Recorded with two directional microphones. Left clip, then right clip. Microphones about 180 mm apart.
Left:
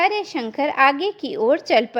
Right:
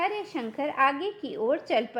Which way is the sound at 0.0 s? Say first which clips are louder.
Left 9 dB; 20° left (ahead or behind).